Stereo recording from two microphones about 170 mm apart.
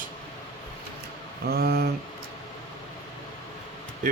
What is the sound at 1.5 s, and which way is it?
Speech, 65° right (ahead or behind).